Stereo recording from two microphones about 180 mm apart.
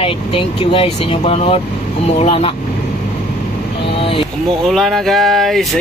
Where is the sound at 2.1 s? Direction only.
30° left (ahead or behind).